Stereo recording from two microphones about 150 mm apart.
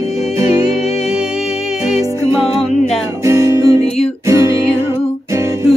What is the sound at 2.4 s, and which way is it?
Music, 40° left (ahead or behind).